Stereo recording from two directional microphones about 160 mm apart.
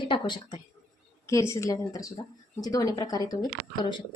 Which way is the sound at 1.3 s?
20° left (ahead or behind).